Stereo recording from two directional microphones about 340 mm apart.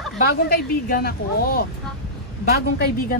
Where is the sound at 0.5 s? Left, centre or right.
Left.